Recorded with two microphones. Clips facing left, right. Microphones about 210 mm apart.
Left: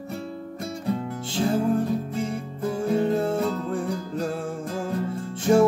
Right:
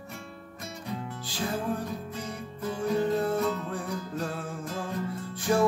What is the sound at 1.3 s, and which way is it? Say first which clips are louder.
Music: left 8 dB; 25° left (ahead or behind).